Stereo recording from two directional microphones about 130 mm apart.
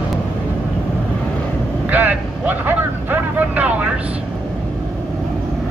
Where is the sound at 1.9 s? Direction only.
15° right (ahead or behind).